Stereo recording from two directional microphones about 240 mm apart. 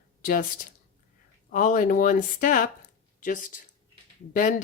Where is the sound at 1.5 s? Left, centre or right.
Left.